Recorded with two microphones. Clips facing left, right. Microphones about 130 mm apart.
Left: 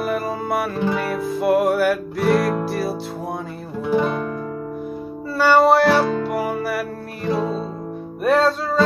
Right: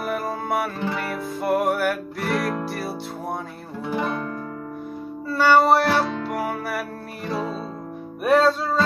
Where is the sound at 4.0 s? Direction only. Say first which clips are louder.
Left 2 dB; 20° left (ahead or behind).